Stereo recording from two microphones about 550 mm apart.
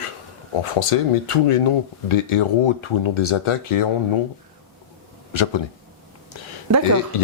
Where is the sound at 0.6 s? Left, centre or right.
Left.